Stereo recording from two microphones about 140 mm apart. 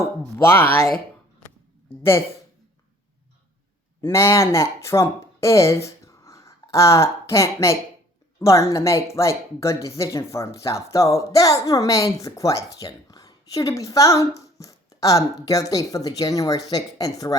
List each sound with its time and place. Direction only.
0.4 s speech: 15° left (ahead or behind)
2.0 s speech: 15° left (ahead or behind)
4.0 s a woman's voice: 20° left (ahead or behind)